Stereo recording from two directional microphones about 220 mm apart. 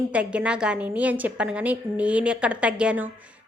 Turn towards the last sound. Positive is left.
turn(degrees=-5)  # may be behind; listen again after turning